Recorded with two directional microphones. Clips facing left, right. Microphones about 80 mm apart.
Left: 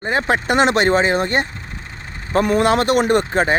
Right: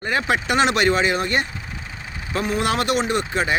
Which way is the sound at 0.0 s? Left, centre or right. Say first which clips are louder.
Left 3 dB; left.